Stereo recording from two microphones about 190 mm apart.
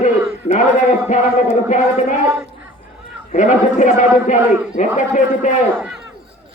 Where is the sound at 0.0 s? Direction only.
40° left (ahead or behind).